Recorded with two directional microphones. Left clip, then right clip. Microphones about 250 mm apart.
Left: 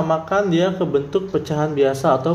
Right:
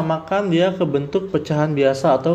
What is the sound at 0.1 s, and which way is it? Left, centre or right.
A man's voice, centre.